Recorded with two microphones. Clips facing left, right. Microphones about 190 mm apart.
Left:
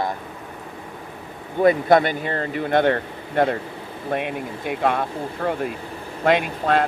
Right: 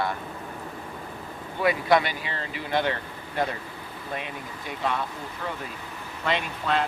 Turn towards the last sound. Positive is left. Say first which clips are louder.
# left 6 dB
turn(degrees=50)  # may be behind; listen again after turning